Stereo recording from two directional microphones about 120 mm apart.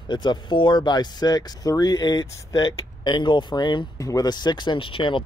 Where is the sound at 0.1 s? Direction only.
40° left (ahead or behind).